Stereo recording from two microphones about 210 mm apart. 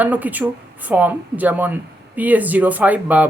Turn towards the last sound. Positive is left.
turn(degrees=-10)  # may be behind; listen again after turning